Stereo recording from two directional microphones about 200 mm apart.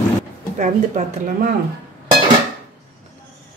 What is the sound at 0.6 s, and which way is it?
Speech, 40° right (ahead or behind).